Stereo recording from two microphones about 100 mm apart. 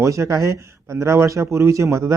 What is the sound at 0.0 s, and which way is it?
Speech, 30° right (ahead or behind).